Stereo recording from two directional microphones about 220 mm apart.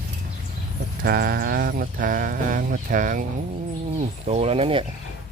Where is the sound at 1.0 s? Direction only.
45° right (ahead or behind).